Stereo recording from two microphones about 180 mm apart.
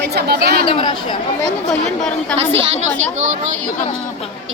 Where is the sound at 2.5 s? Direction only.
40° right (ahead or behind).